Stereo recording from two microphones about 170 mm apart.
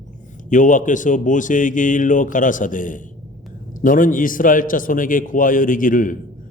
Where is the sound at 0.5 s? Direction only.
50° left (ahead or behind).